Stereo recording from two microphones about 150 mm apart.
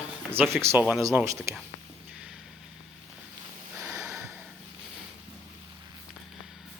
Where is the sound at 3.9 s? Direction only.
20° right (ahead or behind).